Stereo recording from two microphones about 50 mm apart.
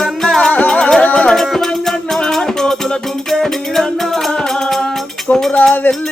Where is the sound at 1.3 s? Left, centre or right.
Centre.